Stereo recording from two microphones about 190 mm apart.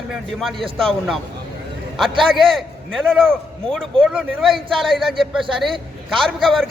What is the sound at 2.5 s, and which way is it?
A man's voice, centre (ahead or behind).